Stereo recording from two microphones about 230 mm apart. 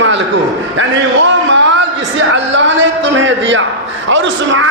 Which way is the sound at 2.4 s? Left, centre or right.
Right.